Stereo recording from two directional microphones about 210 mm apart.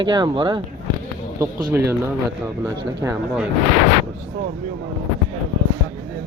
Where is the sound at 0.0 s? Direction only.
20° right (ahead or behind).